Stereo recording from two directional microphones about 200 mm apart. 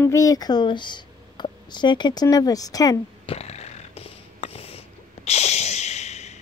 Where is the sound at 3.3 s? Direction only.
30° left (ahead or behind).